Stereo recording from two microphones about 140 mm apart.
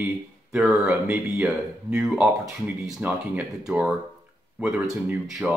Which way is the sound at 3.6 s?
5° right (ahead or behind).